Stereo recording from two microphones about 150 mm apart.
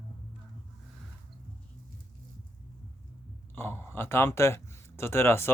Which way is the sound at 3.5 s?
15° left (ahead or behind).